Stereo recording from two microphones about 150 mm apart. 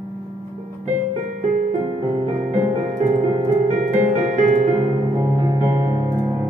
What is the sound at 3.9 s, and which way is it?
Music, 50° right (ahead or behind).